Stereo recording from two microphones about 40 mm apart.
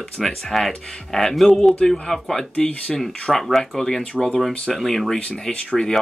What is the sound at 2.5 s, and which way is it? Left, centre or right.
Speech, left.